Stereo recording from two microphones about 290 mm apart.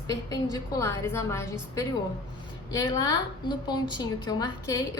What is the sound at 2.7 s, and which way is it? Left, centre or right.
A woman's voice, centre.